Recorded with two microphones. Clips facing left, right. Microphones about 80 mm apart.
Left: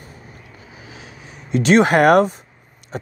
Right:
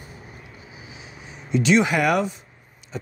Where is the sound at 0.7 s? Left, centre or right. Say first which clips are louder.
Left 4 dB; left.